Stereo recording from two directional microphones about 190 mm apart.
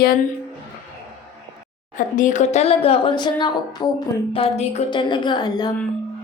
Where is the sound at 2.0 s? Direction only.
40° left (ahead or behind).